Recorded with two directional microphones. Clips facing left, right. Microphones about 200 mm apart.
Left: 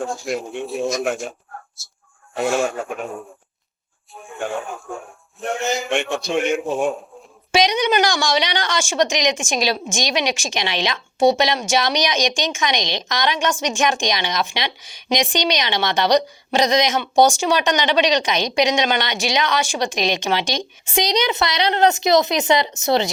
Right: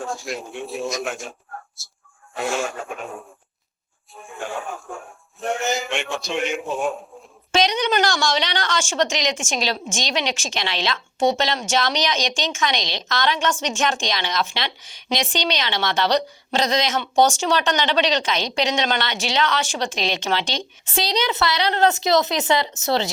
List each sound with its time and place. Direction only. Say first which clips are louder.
0.1 s a man's voice: left 4 dB; centre (ahead or behind)
0.9 s speech: left 6 dB; 55° left (ahead or behind)
1.8 s a man's voice: even; centre (ahead or behind)
4.1 s a man's voice: left 2 dB; centre (ahead or behind)
5.4 s a man's voice: left 1 dB; centre (ahead or behind)
7.5 s a woman's voice: left 2 dB; 10° left (ahead or behind)